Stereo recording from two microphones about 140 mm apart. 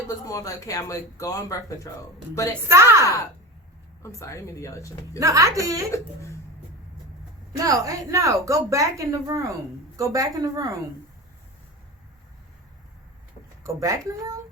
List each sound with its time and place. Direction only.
0.3 s speech: 25° left (ahead or behind)
2.6 s a woman's voice: 20° right (ahead or behind)
4.0 s speech: 20° left (ahead or behind)
5.2 s a woman's voice: 20° right (ahead or behind)
7.5 s a woman's voice: 25° right (ahead or behind)
13.7 s a woman's voice: 20° right (ahead or behind)